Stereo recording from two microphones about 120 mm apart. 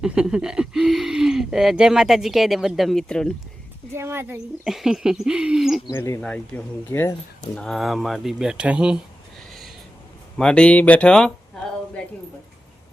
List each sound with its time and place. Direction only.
0.0 s speech: 5° right (ahead or behind)
3.9 s speech: 20° right (ahead or behind)
4.6 s speech: 5° right (ahead or behind)
5.9 s speech: 20° left (ahead or behind)
7.5 s speech: 5° left (ahead or behind)
10.3 s speech: 5° left (ahead or behind)